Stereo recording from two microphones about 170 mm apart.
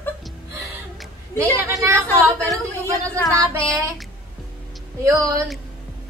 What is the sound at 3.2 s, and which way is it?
Child singing, 15° right (ahead or behind).